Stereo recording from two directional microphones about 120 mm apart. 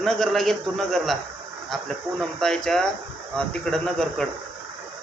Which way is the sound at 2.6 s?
5° left (ahead or behind).